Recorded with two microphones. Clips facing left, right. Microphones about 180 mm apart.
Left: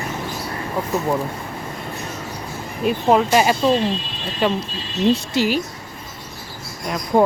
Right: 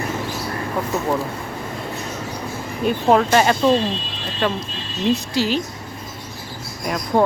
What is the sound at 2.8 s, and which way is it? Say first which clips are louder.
Speech: even; 5° left (ahead or behind).